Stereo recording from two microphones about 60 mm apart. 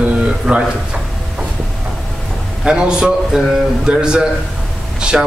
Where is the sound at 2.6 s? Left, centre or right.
Centre.